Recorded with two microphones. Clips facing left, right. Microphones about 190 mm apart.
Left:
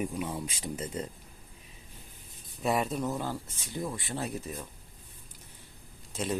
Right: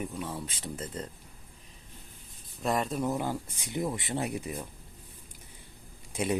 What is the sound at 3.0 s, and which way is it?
Speech, 15° right (ahead or behind).